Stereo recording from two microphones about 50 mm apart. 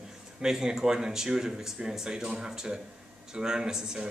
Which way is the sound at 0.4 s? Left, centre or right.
Centre.